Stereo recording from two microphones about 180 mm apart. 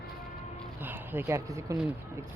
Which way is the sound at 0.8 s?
10° right (ahead or behind).